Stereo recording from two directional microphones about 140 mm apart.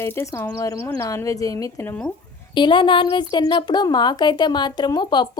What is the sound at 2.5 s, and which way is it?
A woman's voice, 35° left (ahead or behind).